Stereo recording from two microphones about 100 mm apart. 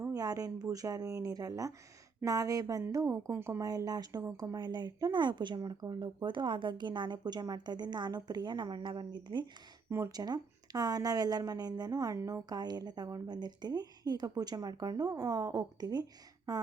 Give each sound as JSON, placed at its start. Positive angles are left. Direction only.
{"t": 0.1, "sound": "a woman's voice", "side_deg": -40}
{"t": 3.6, "sound": "a woman's voice", "side_deg": -40}